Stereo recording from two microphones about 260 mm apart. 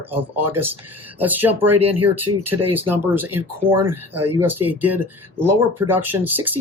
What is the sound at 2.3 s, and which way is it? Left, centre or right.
Speech, right.